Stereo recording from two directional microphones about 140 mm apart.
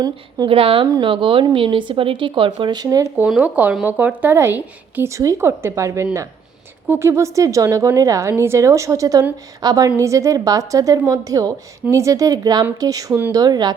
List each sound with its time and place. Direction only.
0.0 s a woman's voice: 30° right (ahead or behind)
0.5 s speech: 40° right (ahead or behind); by 3.1 s 25° right (ahead or behind)
3.2 s a woman's voice: 5° right (ahead or behind); by 13.7 s 30° right (ahead or behind)